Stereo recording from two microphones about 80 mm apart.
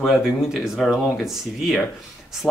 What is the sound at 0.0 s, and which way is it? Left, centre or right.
Speech, centre.